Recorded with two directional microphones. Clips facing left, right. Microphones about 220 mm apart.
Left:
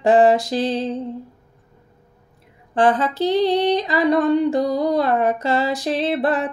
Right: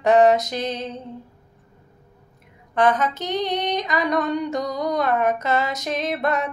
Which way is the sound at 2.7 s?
30° left (ahead or behind).